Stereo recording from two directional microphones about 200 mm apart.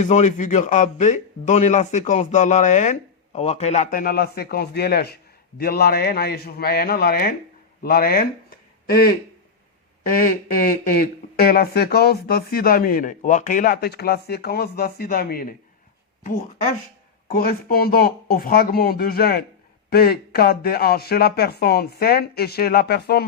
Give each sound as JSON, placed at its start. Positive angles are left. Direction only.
{"t": 0.0, "sound": "a man's voice", "side_deg": 35}
{"t": 17.2, "sound": "speech", "side_deg": 50}